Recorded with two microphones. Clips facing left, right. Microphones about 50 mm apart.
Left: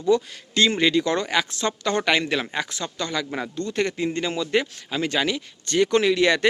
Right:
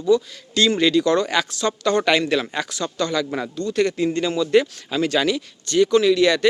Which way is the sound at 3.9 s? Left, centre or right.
Centre.